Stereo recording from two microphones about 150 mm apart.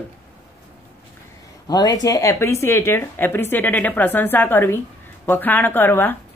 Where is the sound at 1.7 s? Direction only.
25° left (ahead or behind).